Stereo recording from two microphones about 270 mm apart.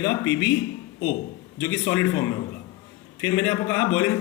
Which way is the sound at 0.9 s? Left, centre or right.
Left.